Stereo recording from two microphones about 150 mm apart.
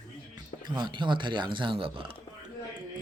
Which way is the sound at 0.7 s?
30° right (ahead or behind).